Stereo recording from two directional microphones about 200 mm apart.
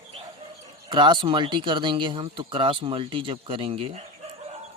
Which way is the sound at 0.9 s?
25° right (ahead or behind).